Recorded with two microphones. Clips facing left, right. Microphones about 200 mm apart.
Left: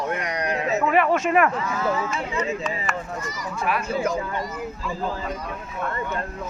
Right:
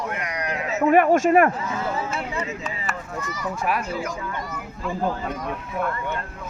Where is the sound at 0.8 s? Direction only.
45° right (ahead or behind).